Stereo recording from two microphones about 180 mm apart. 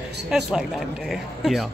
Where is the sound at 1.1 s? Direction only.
Centre (ahead or behind).